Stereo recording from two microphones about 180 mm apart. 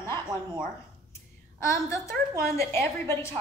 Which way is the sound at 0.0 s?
15° left (ahead or behind).